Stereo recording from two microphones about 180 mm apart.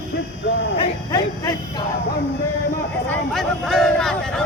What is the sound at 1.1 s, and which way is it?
Speech, 20° left (ahead or behind).